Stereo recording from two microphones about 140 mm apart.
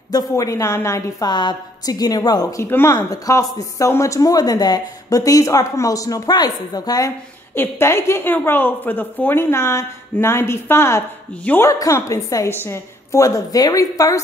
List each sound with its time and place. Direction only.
0.1 s a woman's voice: 25° left (ahead or behind)
7.5 s a woman's voice: 15° left (ahead or behind)